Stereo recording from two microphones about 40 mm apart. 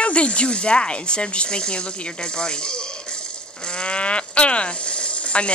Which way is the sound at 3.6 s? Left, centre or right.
Left.